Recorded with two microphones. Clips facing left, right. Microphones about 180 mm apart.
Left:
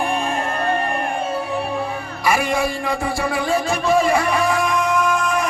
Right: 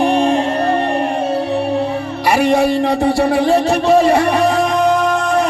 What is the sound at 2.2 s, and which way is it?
Music, 70° right (ahead or behind).